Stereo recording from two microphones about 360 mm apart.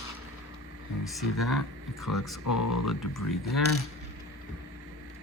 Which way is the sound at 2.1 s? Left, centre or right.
Left.